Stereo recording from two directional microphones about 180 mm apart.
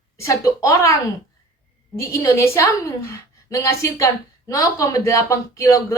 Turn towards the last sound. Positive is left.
turn(degrees=20)  # may be behind; listen again after turning